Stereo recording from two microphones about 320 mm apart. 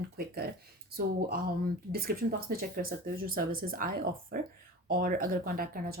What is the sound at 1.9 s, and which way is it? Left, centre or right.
Speech, right.